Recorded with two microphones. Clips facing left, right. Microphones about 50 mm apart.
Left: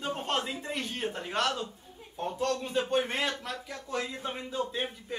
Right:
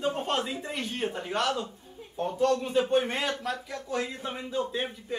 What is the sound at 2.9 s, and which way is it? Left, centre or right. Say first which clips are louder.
Speech: right 3 dB; centre.